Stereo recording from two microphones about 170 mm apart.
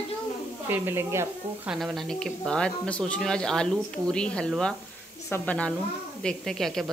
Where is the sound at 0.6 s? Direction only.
15° right (ahead or behind).